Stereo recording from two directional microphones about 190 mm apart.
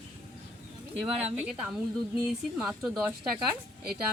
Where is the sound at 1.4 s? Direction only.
5° right (ahead or behind).